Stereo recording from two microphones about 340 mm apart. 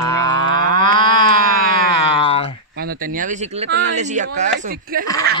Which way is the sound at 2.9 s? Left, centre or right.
Right.